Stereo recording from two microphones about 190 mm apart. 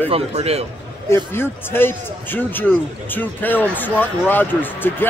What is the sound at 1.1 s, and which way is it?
A man's voice, 10° left (ahead or behind).